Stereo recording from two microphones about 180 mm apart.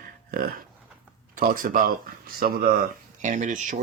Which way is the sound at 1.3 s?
50° right (ahead or behind).